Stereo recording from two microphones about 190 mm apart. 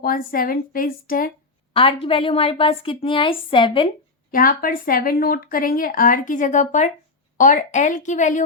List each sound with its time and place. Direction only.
0.0 s speech: 50° left (ahead or behind)
1.7 s a woman's voice: 30° left (ahead or behind)
4.3 s a woman's voice: 45° left (ahead or behind)